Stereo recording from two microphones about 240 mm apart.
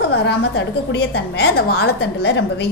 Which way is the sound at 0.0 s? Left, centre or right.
Left.